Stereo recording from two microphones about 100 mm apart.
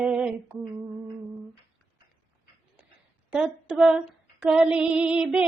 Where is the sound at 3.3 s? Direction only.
10° right (ahead or behind).